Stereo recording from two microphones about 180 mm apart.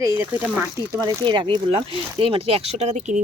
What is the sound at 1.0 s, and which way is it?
Speech, 25° right (ahead or behind).